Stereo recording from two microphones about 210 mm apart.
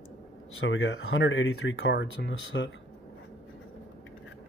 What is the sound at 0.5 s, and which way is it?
Speech, 65° left (ahead or behind).